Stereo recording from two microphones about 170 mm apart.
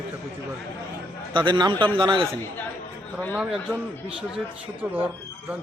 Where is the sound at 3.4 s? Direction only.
5° right (ahead or behind).